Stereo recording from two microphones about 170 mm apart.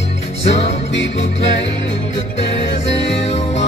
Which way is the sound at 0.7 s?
90° left.